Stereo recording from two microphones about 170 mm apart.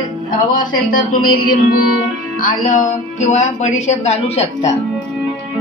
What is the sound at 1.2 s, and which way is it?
Music, 55° left (ahead or behind).